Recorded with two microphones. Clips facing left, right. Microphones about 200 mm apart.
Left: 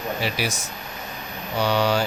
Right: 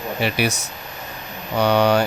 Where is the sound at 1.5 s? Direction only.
60° right (ahead or behind).